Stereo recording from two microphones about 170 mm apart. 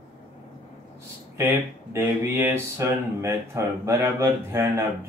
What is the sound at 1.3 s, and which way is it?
Speech, 15° right (ahead or behind).